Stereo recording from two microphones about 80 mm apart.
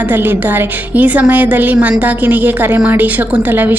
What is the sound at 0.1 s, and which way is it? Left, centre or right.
A woman's voice, right.